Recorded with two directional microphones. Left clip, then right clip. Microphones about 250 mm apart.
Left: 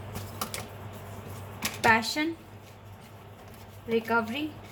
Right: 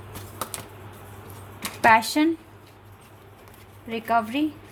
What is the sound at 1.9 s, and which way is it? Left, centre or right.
Speech, right.